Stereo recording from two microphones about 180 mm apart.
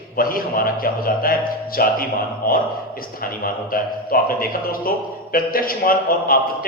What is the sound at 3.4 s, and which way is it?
A man's voice, 50° left (ahead or behind).